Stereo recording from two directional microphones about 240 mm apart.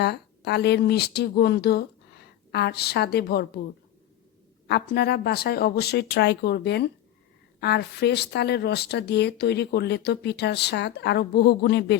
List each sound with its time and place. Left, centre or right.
0.0 s a woman's voice: left
4.7 s speech: left